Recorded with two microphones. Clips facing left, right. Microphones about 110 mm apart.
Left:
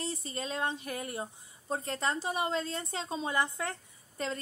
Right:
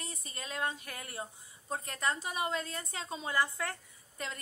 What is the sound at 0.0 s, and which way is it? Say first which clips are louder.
A woman's voice: left 8 dB; 30° left (ahead or behind).